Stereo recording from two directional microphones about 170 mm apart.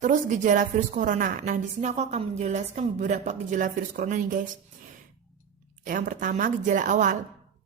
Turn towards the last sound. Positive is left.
turn(degrees=-50)  # may be behind; listen again after turning